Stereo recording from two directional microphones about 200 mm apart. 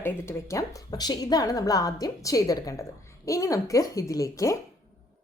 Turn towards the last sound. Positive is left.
turn(degrees=15)  # may be behind; listen again after turning